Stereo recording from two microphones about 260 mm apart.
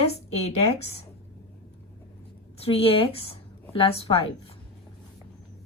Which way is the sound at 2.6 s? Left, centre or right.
Left.